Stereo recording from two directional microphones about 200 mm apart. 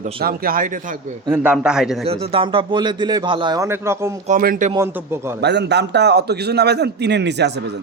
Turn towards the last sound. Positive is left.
turn(degrees=-60)  # may be behind; listen again after turning